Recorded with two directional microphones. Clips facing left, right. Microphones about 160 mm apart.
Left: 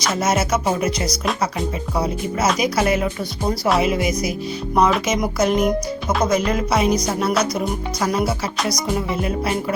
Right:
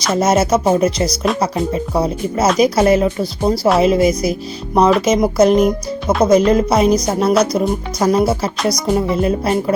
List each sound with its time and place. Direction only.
0.2 s music: 30° right (ahead or behind)